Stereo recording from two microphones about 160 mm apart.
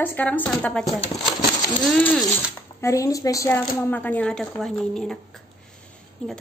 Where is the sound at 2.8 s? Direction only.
20° left (ahead or behind); by 5.1 s 5° left (ahead or behind).